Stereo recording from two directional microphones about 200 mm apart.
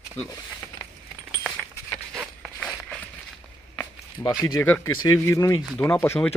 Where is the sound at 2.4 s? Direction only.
5° left (ahead or behind).